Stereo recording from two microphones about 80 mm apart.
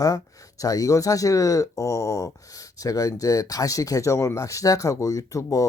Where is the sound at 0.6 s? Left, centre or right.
Left.